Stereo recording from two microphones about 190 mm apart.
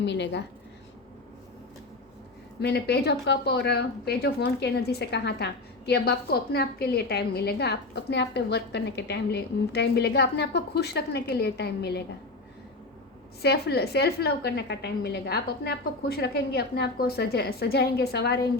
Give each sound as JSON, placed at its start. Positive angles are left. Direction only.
{"t": 0.0, "sound": "speech", "side_deg": 65}
{"t": 2.6, "sound": "speech", "side_deg": 60}
{"t": 13.4, "sound": "speech", "side_deg": 60}